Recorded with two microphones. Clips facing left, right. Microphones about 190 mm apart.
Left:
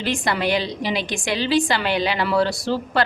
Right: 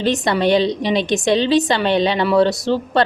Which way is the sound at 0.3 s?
25° right (ahead or behind).